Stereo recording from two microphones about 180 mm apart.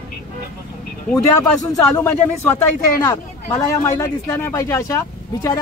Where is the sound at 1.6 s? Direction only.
15° left (ahead or behind).